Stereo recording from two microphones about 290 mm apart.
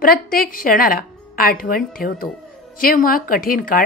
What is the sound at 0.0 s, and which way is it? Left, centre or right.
Speech, left.